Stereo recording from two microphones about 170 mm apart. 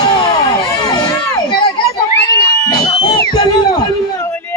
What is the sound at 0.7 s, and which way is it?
Crowd, 20° left (ahead or behind).